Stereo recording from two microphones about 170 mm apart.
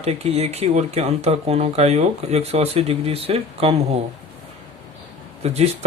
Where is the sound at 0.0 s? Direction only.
40° right (ahead or behind).